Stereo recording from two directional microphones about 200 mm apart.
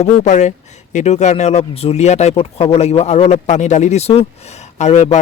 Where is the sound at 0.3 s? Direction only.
35° left (ahead or behind).